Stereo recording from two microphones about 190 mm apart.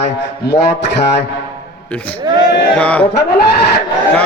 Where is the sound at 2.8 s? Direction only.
5° left (ahead or behind).